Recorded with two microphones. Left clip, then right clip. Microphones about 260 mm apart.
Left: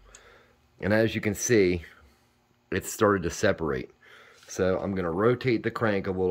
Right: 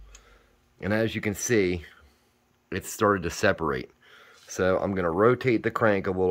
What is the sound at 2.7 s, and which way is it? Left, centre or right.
Speech, centre.